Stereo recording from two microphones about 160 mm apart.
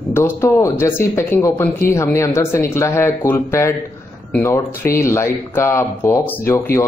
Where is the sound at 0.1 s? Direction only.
15° left (ahead or behind).